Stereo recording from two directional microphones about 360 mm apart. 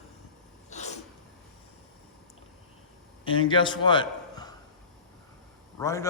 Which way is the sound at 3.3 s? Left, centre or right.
Centre.